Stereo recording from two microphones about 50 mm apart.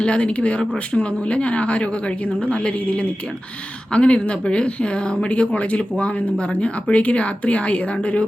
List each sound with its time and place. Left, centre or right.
0.0 s speech: left